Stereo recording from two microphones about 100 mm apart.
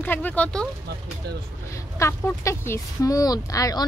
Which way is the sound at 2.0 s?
25° left (ahead or behind).